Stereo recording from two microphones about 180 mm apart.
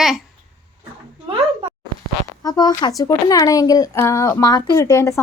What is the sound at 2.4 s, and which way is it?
Speech, 20° left (ahead or behind).